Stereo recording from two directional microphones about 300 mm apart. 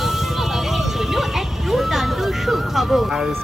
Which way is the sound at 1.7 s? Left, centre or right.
Centre.